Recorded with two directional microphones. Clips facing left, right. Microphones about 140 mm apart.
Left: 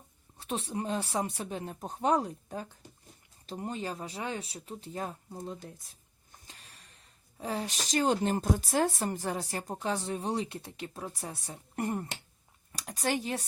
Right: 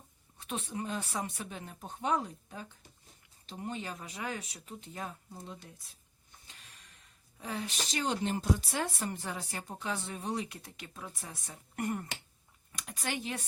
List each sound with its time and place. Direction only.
0.3 s a woman's voice: 35° left (ahead or behind)
7.3 s a woman's voice: 35° left (ahead or behind)